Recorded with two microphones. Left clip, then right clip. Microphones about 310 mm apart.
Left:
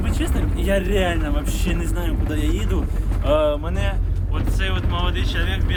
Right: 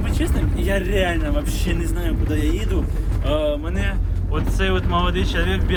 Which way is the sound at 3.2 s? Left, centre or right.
Left.